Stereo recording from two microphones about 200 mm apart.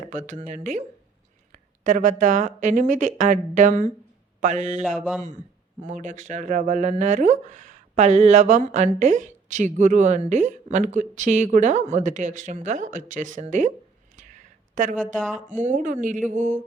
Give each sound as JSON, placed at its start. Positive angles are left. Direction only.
{"t": 0.1, "sound": "speech", "side_deg": -40}
{"t": 14.2, "sound": "a sound", "side_deg": -40}
{"t": 15.0, "sound": "speech", "side_deg": 5}
{"t": 15.5, "sound": "speech", "side_deg": -40}